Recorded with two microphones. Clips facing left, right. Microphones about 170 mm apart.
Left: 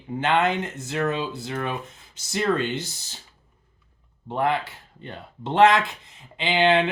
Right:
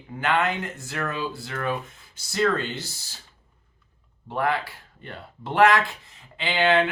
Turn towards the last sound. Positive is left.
turn(degrees=20)  # may be behind; listen again after turning